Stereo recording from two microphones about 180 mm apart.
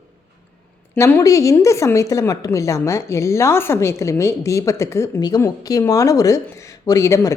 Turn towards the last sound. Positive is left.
turn(degrees=15)  # may be behind; listen again after turning